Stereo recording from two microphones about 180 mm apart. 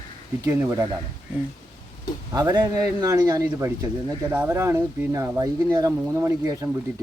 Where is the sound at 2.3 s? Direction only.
20° right (ahead or behind).